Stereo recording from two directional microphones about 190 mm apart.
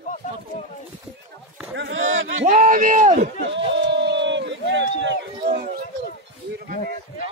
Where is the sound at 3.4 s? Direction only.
65° right (ahead or behind).